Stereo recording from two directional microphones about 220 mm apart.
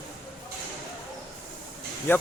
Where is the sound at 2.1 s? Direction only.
10° left (ahead or behind).